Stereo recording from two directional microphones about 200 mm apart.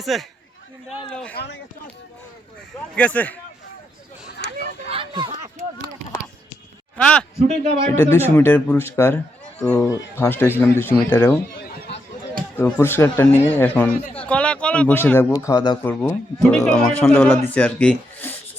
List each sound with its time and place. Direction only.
0.0 s a man's voice: centre (ahead or behind)
2.9 s speech: 5° left (ahead or behind)
4.9 s a sound: 25° right (ahead or behind)
5.3 s a sound: 35° right (ahead or behind)
6.9 s a man's voice: 5° left (ahead or behind)
12.5 s speech: 10° left (ahead or behind)